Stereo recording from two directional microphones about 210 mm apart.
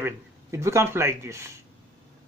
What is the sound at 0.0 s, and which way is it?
Speech, 15° right (ahead or behind).